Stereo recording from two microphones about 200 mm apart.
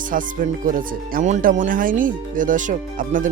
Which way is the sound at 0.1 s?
40° right (ahead or behind).